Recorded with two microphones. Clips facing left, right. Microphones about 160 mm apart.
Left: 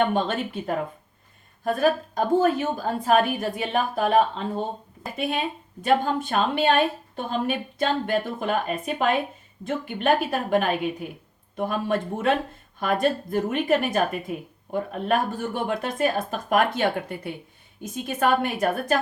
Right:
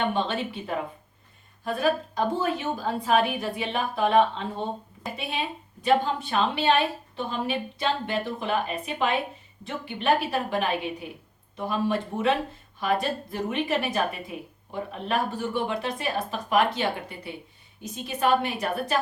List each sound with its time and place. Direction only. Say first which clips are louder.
0.1 s a woman's voice: left 2 dB; 50° left (ahead or behind)
5.8 s a woman's voice: left 1 dB; 50° left (ahead or behind)